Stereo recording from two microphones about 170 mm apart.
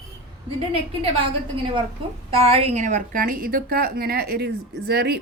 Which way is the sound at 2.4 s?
35° right (ahead or behind).